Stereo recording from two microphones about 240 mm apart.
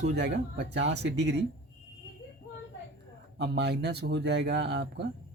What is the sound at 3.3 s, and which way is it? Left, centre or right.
Speech, right.